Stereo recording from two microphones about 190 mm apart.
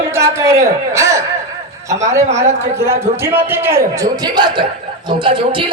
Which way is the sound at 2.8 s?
15° right (ahead or behind).